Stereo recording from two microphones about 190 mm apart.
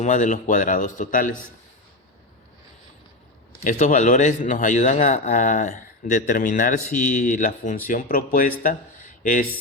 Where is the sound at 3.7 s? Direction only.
40° left (ahead or behind).